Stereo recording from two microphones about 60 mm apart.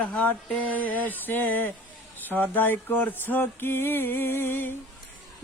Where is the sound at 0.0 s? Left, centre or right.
Left.